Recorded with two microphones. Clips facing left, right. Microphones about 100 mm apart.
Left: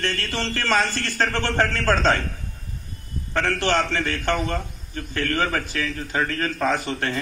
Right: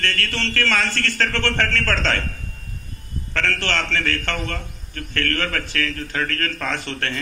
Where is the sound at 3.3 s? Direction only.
15° left (ahead or behind).